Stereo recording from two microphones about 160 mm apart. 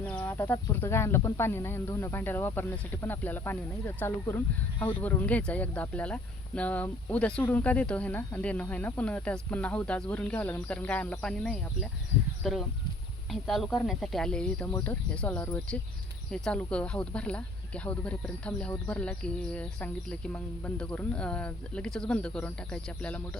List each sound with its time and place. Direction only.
0.1 s speech: 10° left (ahead or behind)